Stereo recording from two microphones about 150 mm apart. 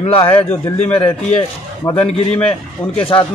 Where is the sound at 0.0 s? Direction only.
40° left (ahead or behind).